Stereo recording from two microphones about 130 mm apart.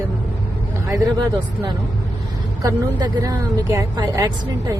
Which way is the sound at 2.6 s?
30° right (ahead or behind).